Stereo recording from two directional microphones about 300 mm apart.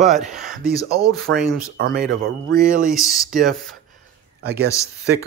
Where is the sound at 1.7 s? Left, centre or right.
Right.